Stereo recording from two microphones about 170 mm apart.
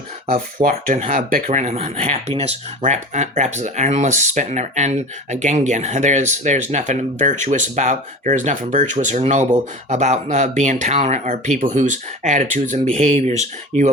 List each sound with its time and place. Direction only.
0.3 s speech: 60° right (ahead or behind)
1.6 s speech: 40° right (ahead or behind)